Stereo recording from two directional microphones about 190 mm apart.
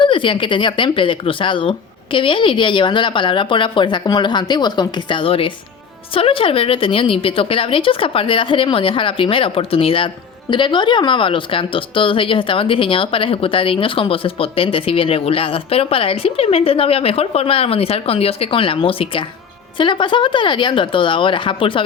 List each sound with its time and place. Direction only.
0.0 s speech: 25° left (ahead or behind)